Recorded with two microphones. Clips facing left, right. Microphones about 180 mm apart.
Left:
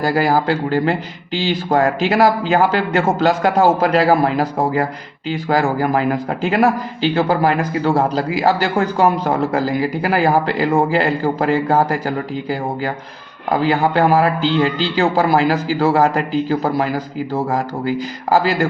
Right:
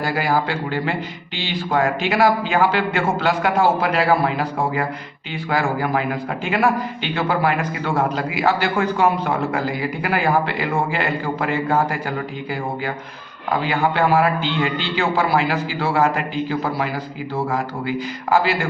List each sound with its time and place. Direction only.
0.0 s a man's voice: 40° left (ahead or behind)